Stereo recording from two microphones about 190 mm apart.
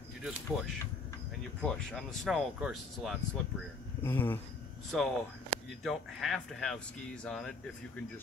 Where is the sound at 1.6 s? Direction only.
5° left (ahead or behind).